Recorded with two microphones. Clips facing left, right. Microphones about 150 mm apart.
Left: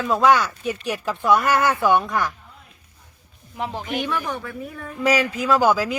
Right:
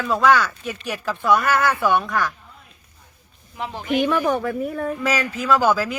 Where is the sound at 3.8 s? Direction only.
40° left (ahead or behind).